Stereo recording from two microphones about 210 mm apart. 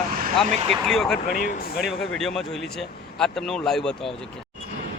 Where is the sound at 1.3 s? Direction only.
45° left (ahead or behind).